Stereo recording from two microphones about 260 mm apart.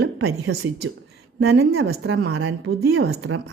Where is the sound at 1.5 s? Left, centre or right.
Right.